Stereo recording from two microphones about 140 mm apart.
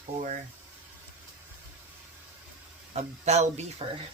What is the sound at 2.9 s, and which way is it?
Speech, 50° right (ahead or behind).